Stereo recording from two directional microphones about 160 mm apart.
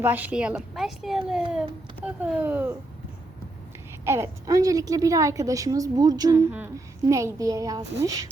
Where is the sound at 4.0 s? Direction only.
15° right (ahead or behind).